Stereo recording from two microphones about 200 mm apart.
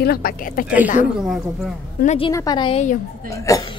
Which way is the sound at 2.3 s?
20° left (ahead or behind).